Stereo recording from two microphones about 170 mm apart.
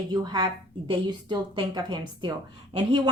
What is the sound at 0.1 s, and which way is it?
Speech, 25° right (ahead or behind).